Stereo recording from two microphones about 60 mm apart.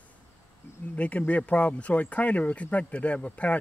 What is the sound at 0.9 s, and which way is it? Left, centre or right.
Speech, left.